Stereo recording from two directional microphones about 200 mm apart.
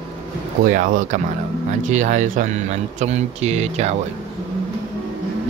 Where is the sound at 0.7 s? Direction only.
40° right (ahead or behind).